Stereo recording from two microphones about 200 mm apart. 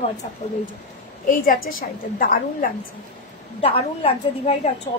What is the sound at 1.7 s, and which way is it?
Speech, 45° left (ahead or behind).